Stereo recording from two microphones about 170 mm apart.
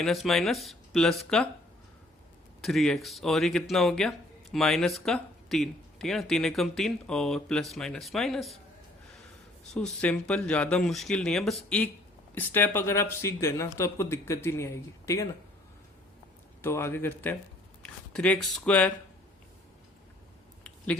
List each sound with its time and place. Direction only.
0.0 s speech: centre (ahead or behind)
2.6 s speech: centre (ahead or behind)
9.7 s speech: 5° left (ahead or behind)
16.6 s speech: 15° left (ahead or behind)
20.7 s a sound: 5° left (ahead or behind)